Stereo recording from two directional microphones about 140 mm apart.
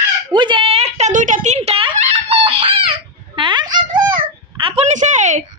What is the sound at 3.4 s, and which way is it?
Dog, 35° right (ahead or behind).